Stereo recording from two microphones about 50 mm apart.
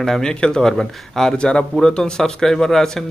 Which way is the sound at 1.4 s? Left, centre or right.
Centre.